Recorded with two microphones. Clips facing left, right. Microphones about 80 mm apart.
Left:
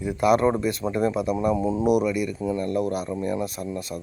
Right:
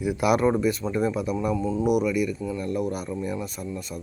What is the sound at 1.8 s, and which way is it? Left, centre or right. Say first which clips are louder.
Speech: right 1 dB; centre.